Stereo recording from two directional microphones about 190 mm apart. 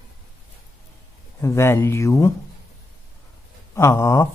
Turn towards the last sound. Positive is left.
turn(degrees=15)  # may be behind; listen again after turning